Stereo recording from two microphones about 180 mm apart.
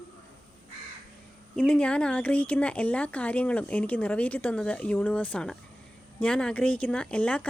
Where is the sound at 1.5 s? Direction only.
5° left (ahead or behind).